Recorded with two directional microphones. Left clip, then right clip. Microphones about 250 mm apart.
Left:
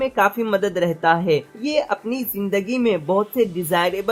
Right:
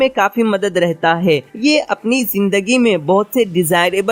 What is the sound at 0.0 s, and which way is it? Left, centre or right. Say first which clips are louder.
Speech: right 5 dB; right.